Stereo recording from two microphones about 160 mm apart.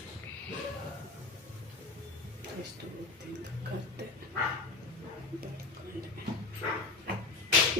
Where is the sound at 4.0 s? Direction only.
90° right.